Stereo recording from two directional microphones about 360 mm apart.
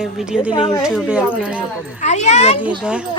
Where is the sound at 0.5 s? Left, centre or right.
Centre.